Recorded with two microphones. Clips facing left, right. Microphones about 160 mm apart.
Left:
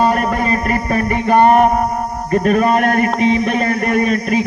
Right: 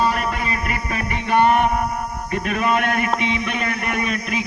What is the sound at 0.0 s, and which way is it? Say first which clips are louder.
Music: left 6 dB; 45° left (ahead or behind).